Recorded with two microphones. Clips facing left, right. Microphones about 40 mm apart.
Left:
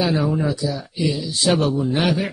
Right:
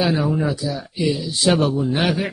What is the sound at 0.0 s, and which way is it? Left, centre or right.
Speech, centre.